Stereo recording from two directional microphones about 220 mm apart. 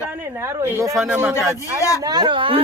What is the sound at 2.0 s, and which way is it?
Speech, 20° right (ahead or behind).